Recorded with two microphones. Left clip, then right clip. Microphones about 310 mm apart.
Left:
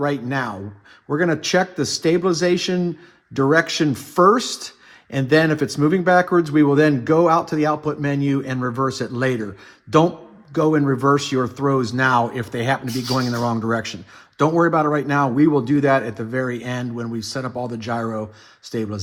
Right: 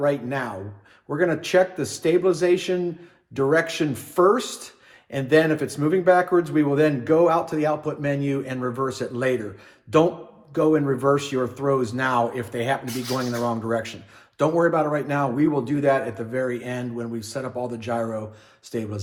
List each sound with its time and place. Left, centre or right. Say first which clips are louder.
0.0 s speech: left 1 dB; left
10.5 s speech: left 2 dB; left